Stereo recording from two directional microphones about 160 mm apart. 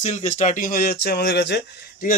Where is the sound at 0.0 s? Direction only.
45° left (ahead or behind).